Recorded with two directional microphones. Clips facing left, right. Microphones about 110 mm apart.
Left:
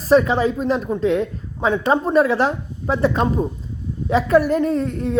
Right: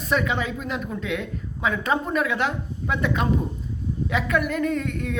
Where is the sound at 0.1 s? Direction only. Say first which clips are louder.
Left 9 dB; 35° left (ahead or behind).